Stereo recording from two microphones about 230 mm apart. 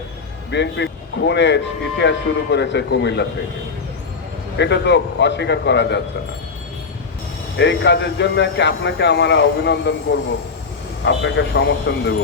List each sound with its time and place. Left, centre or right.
0.5 s speech: left
4.5 s speech: left
7.5 s speech: left
11.0 s speech: left